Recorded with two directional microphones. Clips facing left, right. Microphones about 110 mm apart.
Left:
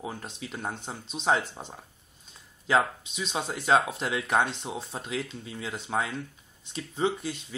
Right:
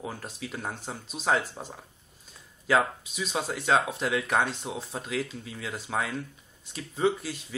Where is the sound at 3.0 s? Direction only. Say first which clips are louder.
Right 1 dB; 5° right (ahead or behind).